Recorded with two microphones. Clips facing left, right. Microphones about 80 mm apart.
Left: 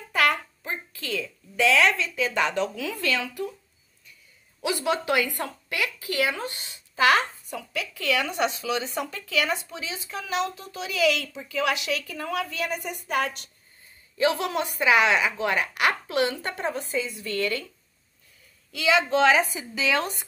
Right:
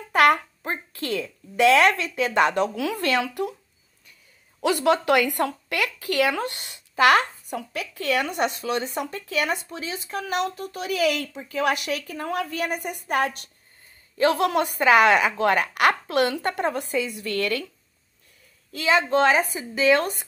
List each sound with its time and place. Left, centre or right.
0.1 s a sound: right
1.6 s speech: right
4.6 s speech: right
18.7 s speech: right